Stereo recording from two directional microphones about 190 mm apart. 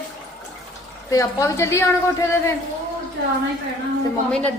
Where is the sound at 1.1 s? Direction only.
15° left (ahead or behind).